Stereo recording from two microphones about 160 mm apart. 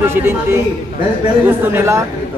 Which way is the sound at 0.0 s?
15° right (ahead or behind).